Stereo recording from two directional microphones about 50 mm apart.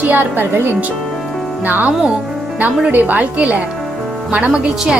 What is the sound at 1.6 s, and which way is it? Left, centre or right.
Speech, right.